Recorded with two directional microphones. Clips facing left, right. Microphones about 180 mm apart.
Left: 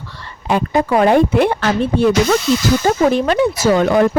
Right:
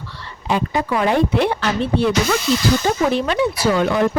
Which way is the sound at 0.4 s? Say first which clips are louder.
Left 4 dB; 50° left (ahead or behind).